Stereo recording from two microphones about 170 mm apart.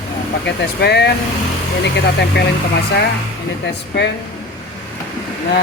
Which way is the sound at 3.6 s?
90° left.